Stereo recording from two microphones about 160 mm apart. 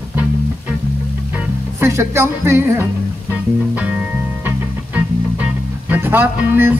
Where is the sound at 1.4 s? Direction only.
15° right (ahead or behind).